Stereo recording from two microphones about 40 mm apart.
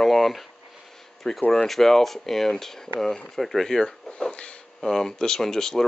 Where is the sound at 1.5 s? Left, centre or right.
Centre.